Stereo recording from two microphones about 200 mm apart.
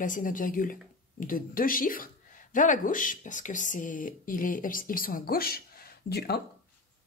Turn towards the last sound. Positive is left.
turn(degrees=50)  # may be behind; listen again after turning